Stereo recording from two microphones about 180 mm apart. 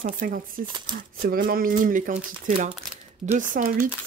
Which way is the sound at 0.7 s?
25° right (ahead or behind).